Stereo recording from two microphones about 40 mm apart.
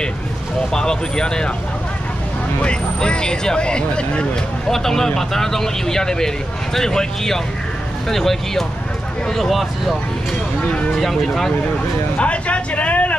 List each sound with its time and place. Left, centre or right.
0.7 s speech: centre
2.6 s speech: left
4.6 s speech: centre
11.0 s speech: centre
12.2 s a sound: left